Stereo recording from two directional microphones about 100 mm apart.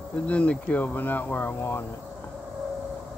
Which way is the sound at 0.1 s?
10° left (ahead or behind).